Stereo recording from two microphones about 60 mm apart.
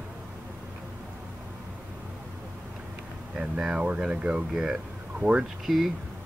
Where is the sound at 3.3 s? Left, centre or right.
Centre.